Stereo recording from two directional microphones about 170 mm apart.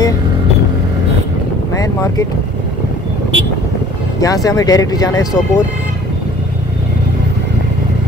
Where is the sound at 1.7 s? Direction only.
20° left (ahead or behind).